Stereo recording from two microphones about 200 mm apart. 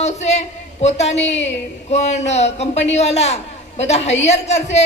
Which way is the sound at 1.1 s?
65° left (ahead or behind).